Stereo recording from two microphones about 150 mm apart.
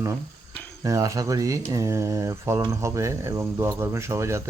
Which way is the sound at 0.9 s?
20° right (ahead or behind).